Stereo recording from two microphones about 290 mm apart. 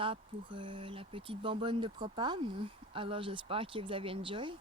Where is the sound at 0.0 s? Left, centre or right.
Centre.